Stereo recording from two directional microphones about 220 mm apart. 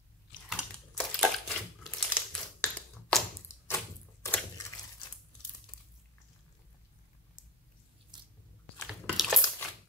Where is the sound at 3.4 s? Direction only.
10° left (ahead or behind).